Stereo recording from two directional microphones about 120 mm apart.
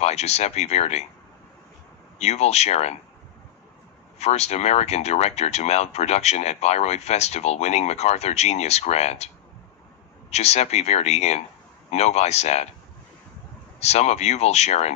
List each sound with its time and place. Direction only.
0.0 s speech: 65° left (ahead or behind)
2.1 s speech: 65° left (ahead or behind)
4.2 s speech: 65° left (ahead or behind)
10.3 s speech: 65° left (ahead or behind)
13.7 s speech: 65° left (ahead or behind)